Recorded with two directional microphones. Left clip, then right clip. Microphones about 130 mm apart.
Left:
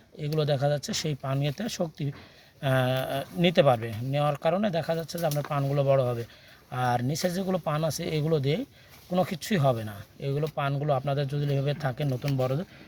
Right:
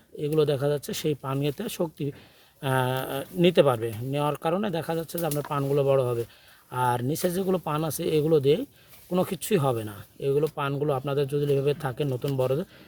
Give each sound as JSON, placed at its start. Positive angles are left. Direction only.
{"t": 0.2, "sound": "speech", "side_deg": -45}